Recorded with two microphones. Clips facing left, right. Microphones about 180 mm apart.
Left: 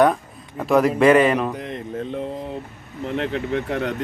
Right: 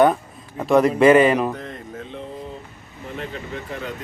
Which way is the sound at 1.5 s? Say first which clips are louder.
Left 3 dB; 20° left (ahead or behind).